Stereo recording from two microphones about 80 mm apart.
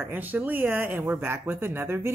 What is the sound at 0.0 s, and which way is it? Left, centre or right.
Speech, right.